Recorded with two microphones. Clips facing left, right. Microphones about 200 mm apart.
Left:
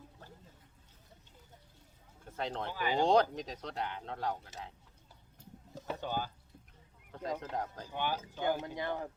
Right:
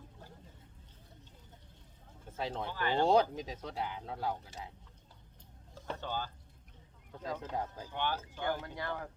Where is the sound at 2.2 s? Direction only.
5° right (ahead or behind).